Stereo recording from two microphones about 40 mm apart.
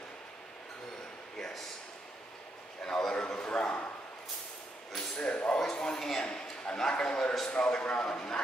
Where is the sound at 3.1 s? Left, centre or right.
Left.